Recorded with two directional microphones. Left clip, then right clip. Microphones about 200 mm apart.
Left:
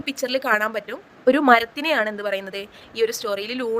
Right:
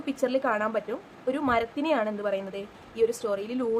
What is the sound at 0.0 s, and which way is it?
A woman's voice, 35° left (ahead or behind).